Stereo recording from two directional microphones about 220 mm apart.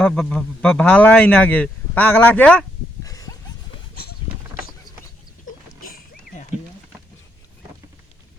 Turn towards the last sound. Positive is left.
turn(degrees=40)  # may be behind; listen again after turning